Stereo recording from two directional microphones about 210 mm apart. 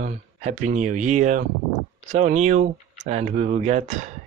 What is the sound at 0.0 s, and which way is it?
Speech, 35° right (ahead or behind).